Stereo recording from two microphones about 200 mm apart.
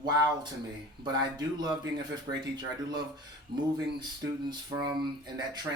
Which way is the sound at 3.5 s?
50° right (ahead or behind).